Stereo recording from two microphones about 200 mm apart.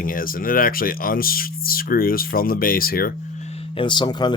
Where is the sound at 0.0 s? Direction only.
45° left (ahead or behind).